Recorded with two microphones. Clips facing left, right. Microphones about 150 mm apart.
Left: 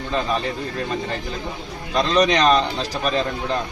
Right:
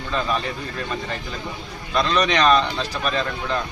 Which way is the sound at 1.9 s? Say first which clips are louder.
Left 3 dB; 35° left (ahead or behind).